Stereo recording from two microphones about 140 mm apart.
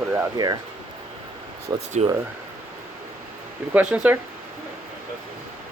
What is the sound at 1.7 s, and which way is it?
Speech, 25° right (ahead or behind).